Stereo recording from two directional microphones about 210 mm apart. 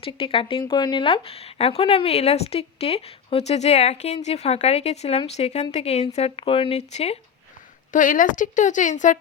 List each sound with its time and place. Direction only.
0.0 s speech: 25° left (ahead or behind)